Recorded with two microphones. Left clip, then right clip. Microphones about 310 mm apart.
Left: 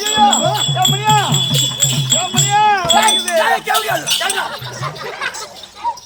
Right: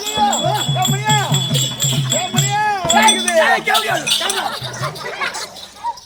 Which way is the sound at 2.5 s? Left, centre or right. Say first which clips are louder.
Left 7 dB; right.